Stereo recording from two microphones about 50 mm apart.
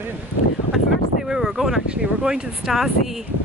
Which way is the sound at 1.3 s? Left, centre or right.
Centre.